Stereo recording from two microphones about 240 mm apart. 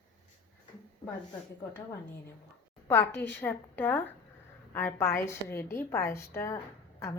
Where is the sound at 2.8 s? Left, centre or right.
Centre.